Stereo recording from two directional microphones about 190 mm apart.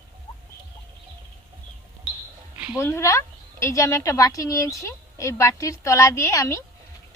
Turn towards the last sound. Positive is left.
turn(degrees=15)  # may be behind; listen again after turning